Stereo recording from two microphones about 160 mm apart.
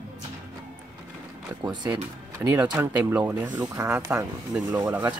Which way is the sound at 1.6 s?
25° right (ahead or behind).